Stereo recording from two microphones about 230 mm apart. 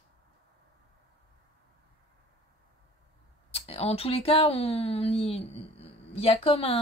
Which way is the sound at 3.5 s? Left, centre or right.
Left.